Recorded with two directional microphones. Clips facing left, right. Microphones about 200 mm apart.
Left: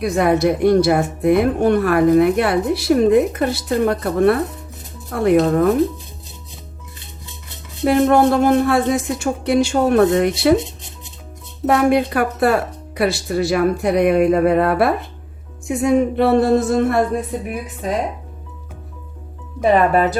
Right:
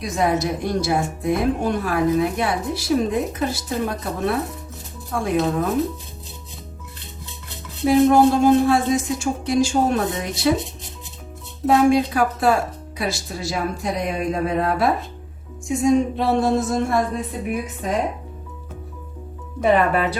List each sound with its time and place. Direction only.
0.0 s a woman's voice: 60° left (ahead or behind)
7.9 s a woman's voice: 60° left (ahead or behind)
11.6 s a woman's voice: 60° left (ahead or behind)
19.7 s speech: 40° left (ahead or behind)